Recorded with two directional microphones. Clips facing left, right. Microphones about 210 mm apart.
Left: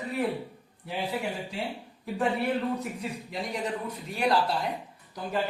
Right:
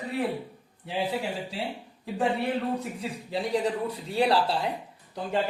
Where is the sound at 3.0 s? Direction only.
30° right (ahead or behind).